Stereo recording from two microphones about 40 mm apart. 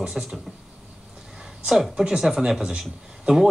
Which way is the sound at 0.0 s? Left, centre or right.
Centre.